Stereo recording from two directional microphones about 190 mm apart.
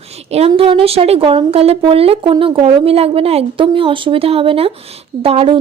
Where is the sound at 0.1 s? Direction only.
35° right (ahead or behind).